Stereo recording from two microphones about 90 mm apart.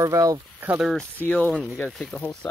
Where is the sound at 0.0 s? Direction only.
40° right (ahead or behind).